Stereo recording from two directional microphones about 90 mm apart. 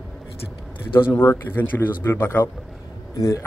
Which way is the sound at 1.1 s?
25° left (ahead or behind).